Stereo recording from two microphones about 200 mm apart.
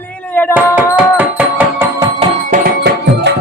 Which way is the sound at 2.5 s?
50° right (ahead or behind).